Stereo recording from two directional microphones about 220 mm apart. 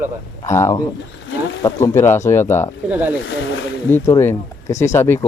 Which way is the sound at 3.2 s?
60° left (ahead or behind).